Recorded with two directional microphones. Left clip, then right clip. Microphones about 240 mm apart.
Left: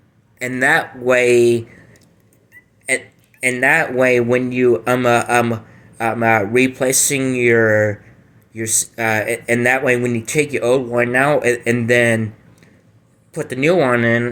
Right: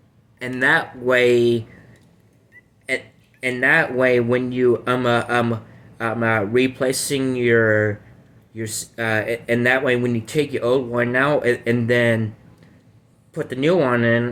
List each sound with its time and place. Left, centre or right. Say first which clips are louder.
0.5 s speech: left 2 dB; left
3.4 s speech: left 3 dB; left
13.3 s speech: left 3 dB; left